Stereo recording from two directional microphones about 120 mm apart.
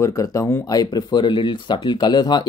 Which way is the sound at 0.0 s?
25° left (ahead or behind).